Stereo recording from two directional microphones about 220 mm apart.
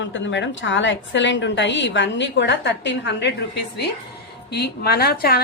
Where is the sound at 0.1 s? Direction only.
55° left (ahead or behind).